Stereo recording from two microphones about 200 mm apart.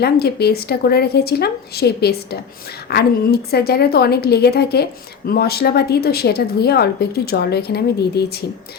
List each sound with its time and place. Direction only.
0.0 s a woman's voice: 55° left (ahead or behind)